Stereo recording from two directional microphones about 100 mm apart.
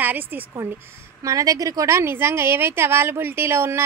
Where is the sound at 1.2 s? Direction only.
35° right (ahead or behind).